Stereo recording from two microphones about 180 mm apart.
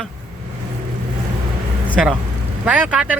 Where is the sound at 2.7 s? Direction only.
5° right (ahead or behind).